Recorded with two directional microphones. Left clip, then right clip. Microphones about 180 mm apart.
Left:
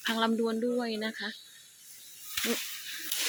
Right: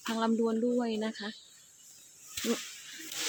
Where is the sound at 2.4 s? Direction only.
25° left (ahead or behind).